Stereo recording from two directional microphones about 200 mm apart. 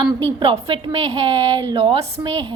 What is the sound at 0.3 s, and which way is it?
A woman's voice, 25° right (ahead or behind).